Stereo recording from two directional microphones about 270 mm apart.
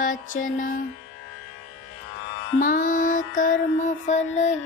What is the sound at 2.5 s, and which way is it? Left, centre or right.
Mantra, left.